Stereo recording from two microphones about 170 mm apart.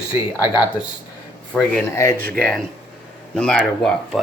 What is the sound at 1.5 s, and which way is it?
Speech, 5° left (ahead or behind).